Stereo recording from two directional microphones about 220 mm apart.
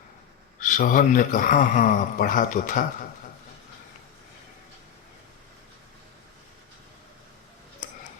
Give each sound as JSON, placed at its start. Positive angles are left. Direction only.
{"t": 0.6, "sound": "a man's voice", "side_deg": 35}